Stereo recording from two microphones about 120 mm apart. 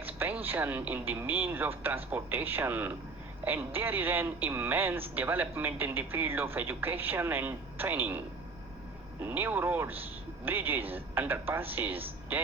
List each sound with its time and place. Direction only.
0.0 s a sound: 15° right (ahead or behind)
0.4 s speech: 15° right (ahead or behind)
9.2 s speech: 15° right (ahead or behind)